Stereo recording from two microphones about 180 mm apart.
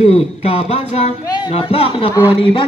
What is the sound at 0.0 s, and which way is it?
Speech, 35° left (ahead or behind).